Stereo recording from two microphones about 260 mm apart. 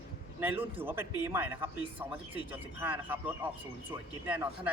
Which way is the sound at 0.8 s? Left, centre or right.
Centre.